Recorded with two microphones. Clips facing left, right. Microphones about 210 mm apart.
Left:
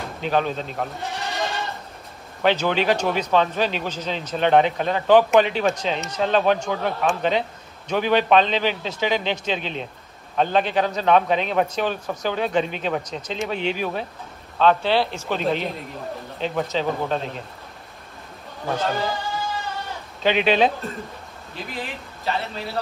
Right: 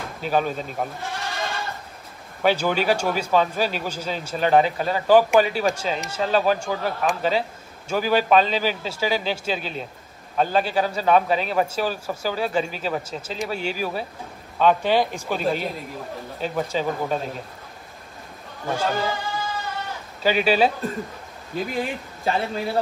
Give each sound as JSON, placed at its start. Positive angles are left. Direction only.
{"t": 0.2, "sound": "goat", "side_deg": -5}
{"t": 2.4, "sound": "a man's voice", "side_deg": -10}
{"t": 18.7, "sound": "a man's voice", "side_deg": 0}
{"t": 20.2, "sound": "speech", "side_deg": -5}
{"t": 21.7, "sound": "speech", "side_deg": -45}